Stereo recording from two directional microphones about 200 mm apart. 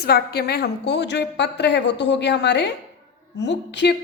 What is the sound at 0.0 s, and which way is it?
A woman's voice, 50° left (ahead or behind).